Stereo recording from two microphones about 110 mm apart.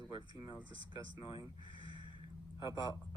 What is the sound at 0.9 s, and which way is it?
Speech, 45° left (ahead or behind).